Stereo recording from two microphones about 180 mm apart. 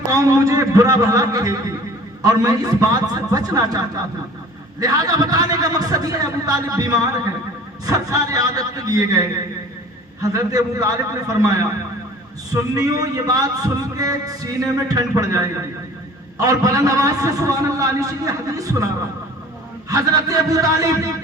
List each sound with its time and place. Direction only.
0.1 s a man's voice: 20° right (ahead or behind)
12.5 s a man's voice: 20° right (ahead or behind)
19.9 s a man's voice: 20° right (ahead or behind)